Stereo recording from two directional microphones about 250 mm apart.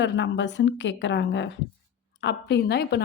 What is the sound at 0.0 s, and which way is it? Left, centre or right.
Speech, left.